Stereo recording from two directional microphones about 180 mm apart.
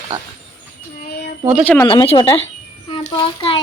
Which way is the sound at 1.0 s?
60° left (ahead or behind).